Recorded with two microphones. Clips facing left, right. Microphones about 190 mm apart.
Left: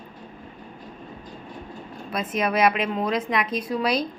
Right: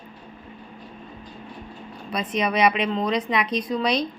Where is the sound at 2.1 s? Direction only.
5° left (ahead or behind).